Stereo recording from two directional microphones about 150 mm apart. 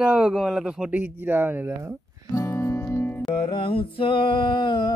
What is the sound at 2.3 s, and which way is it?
Music, 20° left (ahead or behind).